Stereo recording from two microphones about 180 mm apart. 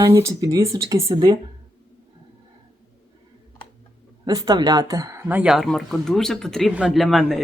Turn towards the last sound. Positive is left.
turn(degrees=0)  # may be behind; listen again after turning